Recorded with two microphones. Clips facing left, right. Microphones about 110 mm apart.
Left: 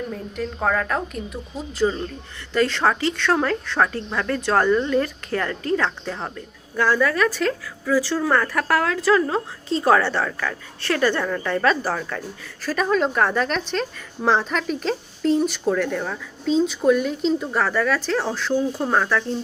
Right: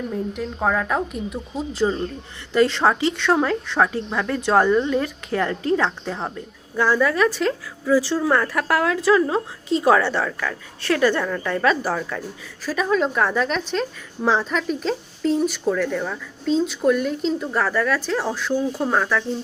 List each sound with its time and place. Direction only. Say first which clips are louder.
0.1 s a woman's voice: right 2 dB; 10° right (ahead or behind)